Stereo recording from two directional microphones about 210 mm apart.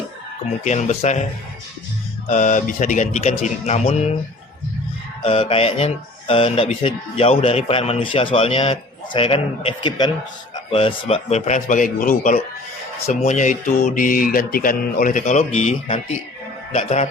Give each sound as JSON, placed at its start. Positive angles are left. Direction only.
{"t": 0.6, "sound": "speech", "side_deg": 35}
{"t": 2.3, "sound": "speech", "side_deg": 35}
{"t": 5.2, "sound": "speech", "side_deg": 25}